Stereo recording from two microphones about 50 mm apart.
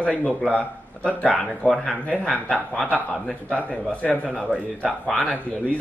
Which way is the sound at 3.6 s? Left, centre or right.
Left.